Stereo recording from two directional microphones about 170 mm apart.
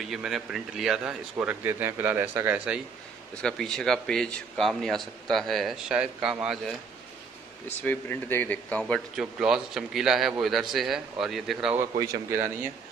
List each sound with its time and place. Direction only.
0.1 s speech: centre (ahead or behind)
3.4 s speech: 5° left (ahead or behind)
7.8 s speech: 10° left (ahead or behind)
9.2 s speech: 5° right (ahead or behind)
12.0 s speech: 20° right (ahead or behind)